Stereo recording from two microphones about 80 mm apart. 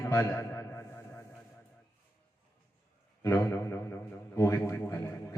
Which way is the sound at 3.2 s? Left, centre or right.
Left.